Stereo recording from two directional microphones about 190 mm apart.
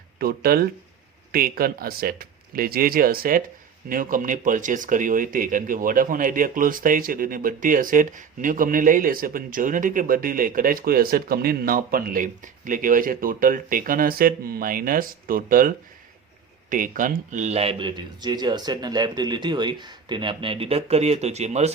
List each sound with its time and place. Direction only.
0.2 s speech: 55° right (ahead or behind); by 21.7 s 35° right (ahead or behind)